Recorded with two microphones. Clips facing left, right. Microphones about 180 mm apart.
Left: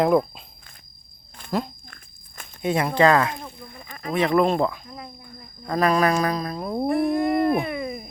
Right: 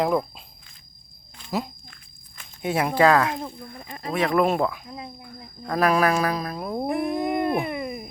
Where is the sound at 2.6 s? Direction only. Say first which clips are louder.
Left 1 dB; 10° right (ahead or behind).